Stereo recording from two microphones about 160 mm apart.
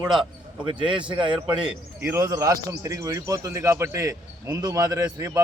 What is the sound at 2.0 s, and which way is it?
A man's voice, 15° right (ahead or behind).